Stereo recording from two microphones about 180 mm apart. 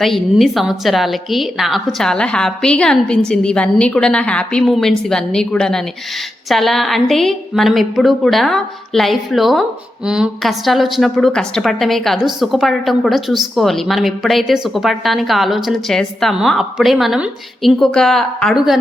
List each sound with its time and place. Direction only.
0.0 s a woman's voice: centre (ahead or behind)